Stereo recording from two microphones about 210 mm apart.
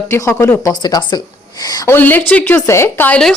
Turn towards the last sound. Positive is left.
turn(degrees=5)  # may be behind; listen again after turning